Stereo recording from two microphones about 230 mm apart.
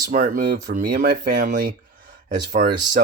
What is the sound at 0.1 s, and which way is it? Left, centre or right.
Speech, right.